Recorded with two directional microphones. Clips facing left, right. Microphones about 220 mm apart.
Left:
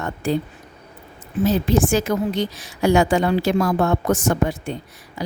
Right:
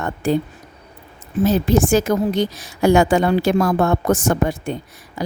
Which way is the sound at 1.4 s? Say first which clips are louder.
Right 2 dB; 45° right (ahead or behind).